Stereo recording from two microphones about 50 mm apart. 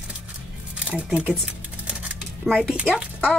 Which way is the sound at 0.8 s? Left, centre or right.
Right.